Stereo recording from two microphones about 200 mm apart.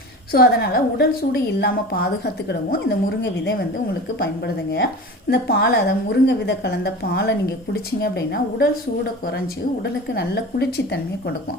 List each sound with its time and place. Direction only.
0.3 s a woman's voice: 50° left (ahead or behind)
9.8 s a woman's voice: 55° left (ahead or behind)